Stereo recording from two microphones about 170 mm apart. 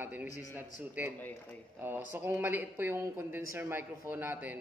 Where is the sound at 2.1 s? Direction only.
10° right (ahead or behind).